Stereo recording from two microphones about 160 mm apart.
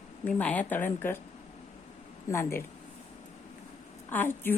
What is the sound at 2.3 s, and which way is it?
Speech, 15° left (ahead or behind).